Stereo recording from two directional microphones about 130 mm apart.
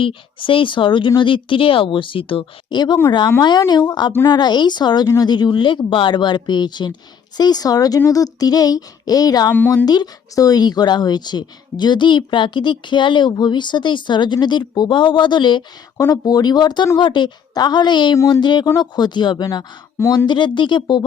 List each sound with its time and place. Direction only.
0.0 s speech: 40° left (ahead or behind)
9.5 s speech: 15° left (ahead or behind)
9.8 s speech: 30° left (ahead or behind)